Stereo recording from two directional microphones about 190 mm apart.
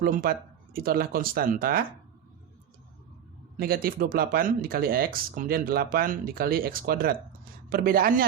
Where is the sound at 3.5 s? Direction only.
50° right (ahead or behind).